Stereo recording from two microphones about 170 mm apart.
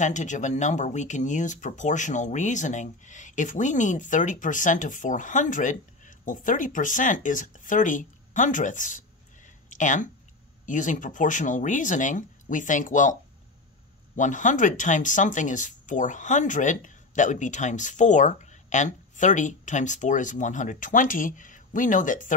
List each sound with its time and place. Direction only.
0.0 s speech: 45° left (ahead or behind)
14.1 s speech: 45° left (ahead or behind)